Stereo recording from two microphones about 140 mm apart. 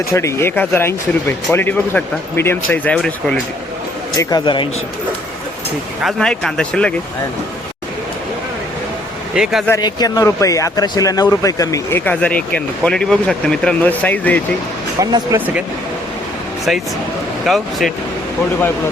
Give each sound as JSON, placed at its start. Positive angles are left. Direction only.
{"t": 0.1, "sound": "speech", "side_deg": 20}
{"t": 4.2, "sound": "a man's voice", "side_deg": 30}
{"t": 6.0, "sound": "speech", "side_deg": 0}
{"t": 9.3, "sound": "speech", "side_deg": -5}
{"t": 9.8, "sound": "speech", "side_deg": 25}
{"t": 15.0, "sound": "speech", "side_deg": -25}
{"t": 17.4, "sound": "speech", "side_deg": 0}